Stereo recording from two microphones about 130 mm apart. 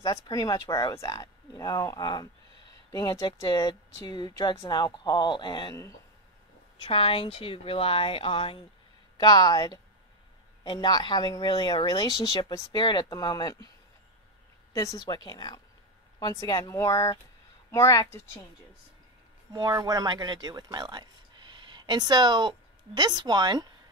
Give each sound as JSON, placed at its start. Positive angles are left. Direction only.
{"t": 0.0, "sound": "speech", "side_deg": 25}
{"t": 6.8, "sound": "speech", "side_deg": 45}
{"t": 9.1, "sound": "speech", "side_deg": 35}
{"t": 14.7, "sound": "speech", "side_deg": 25}
{"t": 19.5, "sound": "speech", "side_deg": -30}